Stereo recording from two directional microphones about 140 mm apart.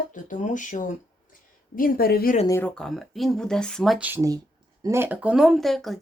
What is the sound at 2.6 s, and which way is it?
Speech, 5° left (ahead or behind).